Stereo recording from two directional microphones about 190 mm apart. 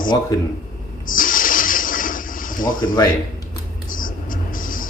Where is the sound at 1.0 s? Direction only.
45° left (ahead or behind).